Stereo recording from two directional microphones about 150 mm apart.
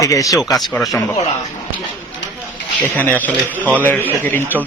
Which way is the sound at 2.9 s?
10° left (ahead or behind).